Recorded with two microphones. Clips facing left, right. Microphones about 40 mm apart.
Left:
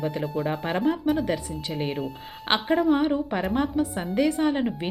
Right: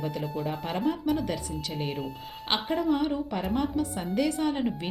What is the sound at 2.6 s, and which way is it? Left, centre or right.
Speech, centre.